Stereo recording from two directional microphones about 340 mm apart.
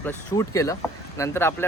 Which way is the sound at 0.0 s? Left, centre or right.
Centre.